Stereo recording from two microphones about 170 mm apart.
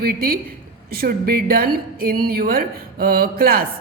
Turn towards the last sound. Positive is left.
turn(degrees=-60)  # may be behind; listen again after turning